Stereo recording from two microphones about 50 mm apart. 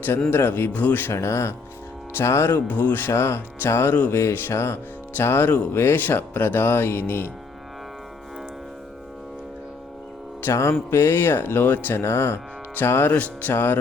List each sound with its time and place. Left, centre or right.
0.3 s speech: left
0.7 s speech: left
1.1 s speech: left
2.6 s speech: left
3.1 s speech: left
4.1 s music: left
5.1 s speech: left
10.5 s speech: left
10.9 s speech: left
11.9 s music: left
12.7 s speech: left
13.5 s speech: left